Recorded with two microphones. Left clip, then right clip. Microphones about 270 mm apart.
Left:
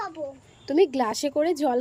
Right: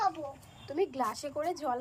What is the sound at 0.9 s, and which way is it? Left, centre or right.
Speech, left.